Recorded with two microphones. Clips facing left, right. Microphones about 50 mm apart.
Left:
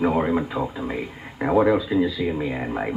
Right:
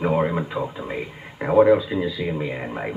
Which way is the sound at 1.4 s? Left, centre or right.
Centre.